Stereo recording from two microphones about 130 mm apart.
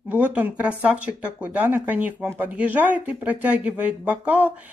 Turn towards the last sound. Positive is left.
turn(degrees=-10)  # may be behind; listen again after turning